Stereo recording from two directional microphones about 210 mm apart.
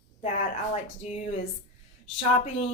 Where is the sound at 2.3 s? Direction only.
30° left (ahead or behind).